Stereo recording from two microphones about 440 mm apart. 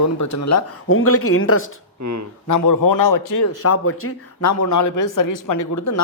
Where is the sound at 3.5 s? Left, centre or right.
Left.